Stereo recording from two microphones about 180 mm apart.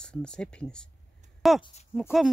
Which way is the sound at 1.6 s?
35° left (ahead or behind).